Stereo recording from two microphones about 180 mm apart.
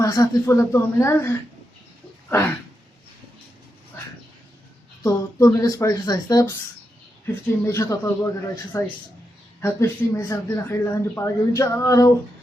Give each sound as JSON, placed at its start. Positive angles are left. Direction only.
{"t": 0.0, "sound": "speech", "side_deg": 20}
{"t": 5.0, "sound": "speech", "side_deg": 20}